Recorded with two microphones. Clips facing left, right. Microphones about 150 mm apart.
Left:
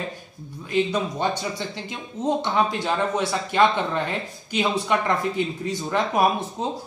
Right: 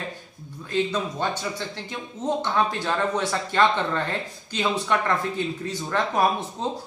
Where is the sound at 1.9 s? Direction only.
15° left (ahead or behind).